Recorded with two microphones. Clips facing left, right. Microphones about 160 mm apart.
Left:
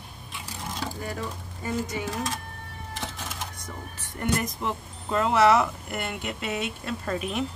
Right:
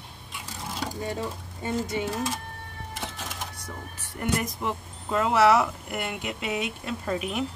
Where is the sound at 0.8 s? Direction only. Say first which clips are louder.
Right 3 dB; 25° right (ahead or behind).